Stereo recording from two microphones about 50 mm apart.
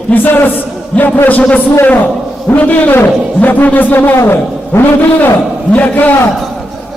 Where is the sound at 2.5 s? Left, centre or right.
Left.